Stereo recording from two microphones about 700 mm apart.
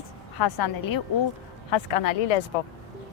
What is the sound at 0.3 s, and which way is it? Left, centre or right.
Speech, left.